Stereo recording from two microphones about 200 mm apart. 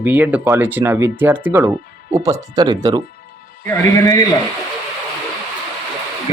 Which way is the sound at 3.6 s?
10° left (ahead or behind).